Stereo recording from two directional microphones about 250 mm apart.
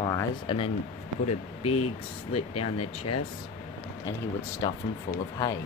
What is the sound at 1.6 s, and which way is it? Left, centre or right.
Speech, left.